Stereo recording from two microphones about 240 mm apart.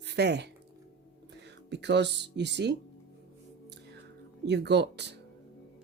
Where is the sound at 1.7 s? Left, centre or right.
Right.